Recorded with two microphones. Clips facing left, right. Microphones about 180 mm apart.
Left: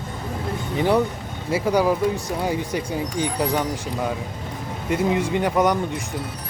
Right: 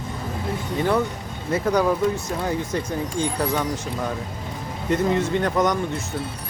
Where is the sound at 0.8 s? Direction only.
15° left (ahead or behind).